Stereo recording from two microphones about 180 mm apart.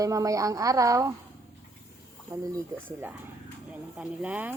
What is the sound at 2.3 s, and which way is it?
A woman's voice, 15° right (ahead or behind).